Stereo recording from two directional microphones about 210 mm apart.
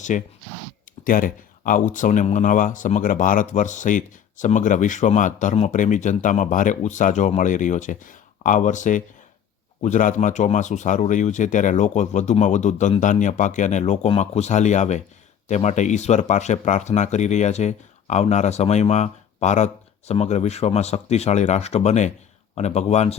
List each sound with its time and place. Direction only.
0.1 s speech: 35° left (ahead or behind)